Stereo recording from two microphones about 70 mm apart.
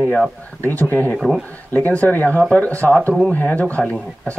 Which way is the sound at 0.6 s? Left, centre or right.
Left.